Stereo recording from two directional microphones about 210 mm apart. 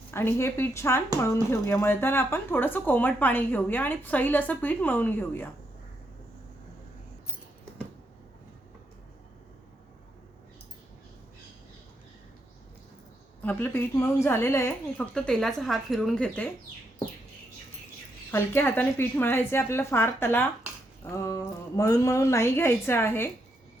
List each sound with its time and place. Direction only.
0.1 s speech: 10° left (ahead or behind)
13.4 s speech: 10° left (ahead or behind)
18.3 s speech: 10° left (ahead or behind)